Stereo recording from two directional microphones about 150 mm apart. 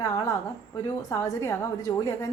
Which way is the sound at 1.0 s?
20° left (ahead or behind).